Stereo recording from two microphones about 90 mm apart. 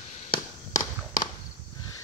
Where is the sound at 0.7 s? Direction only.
45° left (ahead or behind).